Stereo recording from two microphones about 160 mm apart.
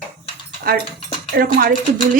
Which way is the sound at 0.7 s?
65° right (ahead or behind).